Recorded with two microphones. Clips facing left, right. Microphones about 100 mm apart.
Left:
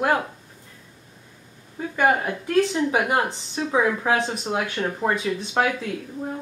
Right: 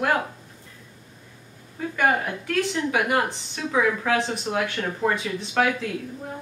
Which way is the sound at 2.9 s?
25° left (ahead or behind).